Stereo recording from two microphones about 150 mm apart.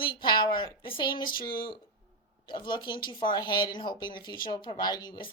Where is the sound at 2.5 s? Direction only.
30° left (ahead or behind).